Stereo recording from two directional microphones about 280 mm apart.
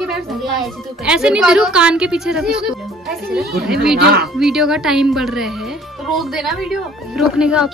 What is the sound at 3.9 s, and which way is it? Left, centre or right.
Speech, right.